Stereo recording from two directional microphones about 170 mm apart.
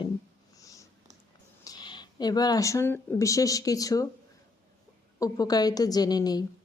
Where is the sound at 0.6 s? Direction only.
20° left (ahead or behind).